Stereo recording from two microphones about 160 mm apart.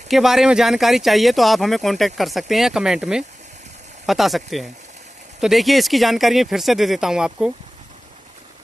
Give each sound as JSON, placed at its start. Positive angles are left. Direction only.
{"t": 0.1, "sound": "speech", "side_deg": 0}